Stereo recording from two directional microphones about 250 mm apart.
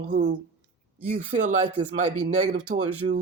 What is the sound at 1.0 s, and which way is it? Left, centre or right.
Speech, right.